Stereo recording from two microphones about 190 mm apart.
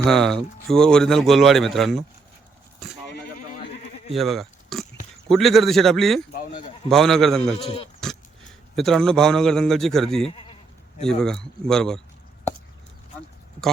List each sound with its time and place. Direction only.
0.0 s speech: centre (ahead or behind)
4.1 s oink: centre (ahead or behind)
5.3 s speech: centre (ahead or behind)
6.3 s speech: 45° left (ahead or behind)
6.8 s speech: centre (ahead or behind)
8.7 s speech: centre (ahead or behind)